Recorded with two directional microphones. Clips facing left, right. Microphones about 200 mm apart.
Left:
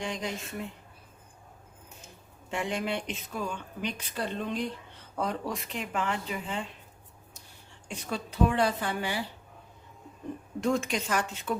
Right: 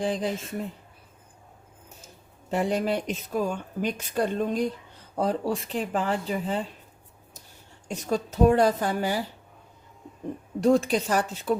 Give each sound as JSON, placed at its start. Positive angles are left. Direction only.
{"t": 0.0, "sound": "a woman's voice", "side_deg": -35}
{"t": 2.5, "sound": "a woman's voice", "side_deg": -40}
{"t": 7.9, "sound": "a woman's voice", "side_deg": -40}
{"t": 10.6, "sound": "a woman's voice", "side_deg": -35}